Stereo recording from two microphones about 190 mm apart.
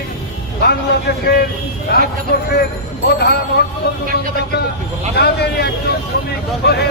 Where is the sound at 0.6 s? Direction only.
60° left (ahead or behind).